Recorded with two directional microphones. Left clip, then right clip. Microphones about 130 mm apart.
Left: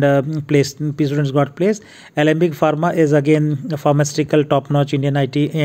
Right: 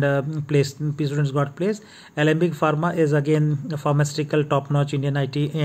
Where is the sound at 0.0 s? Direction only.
40° left (ahead or behind).